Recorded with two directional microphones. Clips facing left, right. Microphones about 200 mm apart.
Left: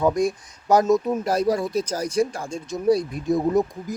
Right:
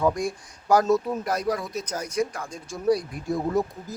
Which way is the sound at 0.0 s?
20° left (ahead or behind).